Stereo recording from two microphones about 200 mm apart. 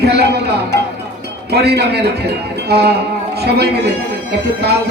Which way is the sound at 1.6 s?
55° right (ahead or behind).